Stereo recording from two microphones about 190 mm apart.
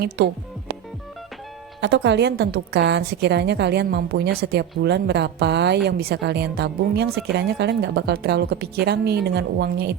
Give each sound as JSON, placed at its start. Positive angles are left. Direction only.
{"t": 1.8, "sound": "a woman's voice", "side_deg": -65}